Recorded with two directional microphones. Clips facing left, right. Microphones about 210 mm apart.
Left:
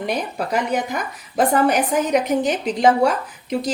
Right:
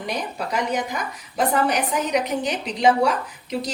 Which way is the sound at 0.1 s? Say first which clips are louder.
Left 3 dB; 55° left (ahead or behind).